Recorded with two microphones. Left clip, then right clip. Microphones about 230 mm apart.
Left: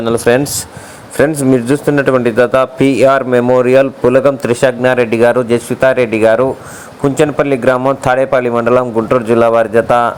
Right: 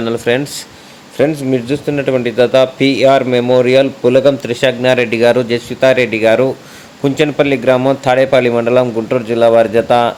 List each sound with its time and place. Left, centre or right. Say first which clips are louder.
0.0 s speech: left 4 dB; centre